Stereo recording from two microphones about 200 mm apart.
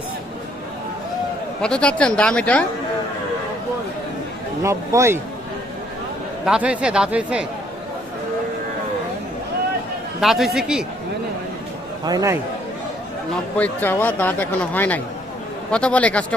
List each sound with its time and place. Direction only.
1.6 s speech: 5° left (ahead or behind)
4.6 s speech: 15° right (ahead or behind)
6.4 s speech: 5° right (ahead or behind)
10.2 s speech: centre (ahead or behind)
12.0 s speech: 15° right (ahead or behind)
13.6 s speech: 10° left (ahead or behind)